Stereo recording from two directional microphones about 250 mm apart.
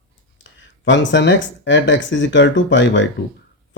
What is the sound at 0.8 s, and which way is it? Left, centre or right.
Speech, left.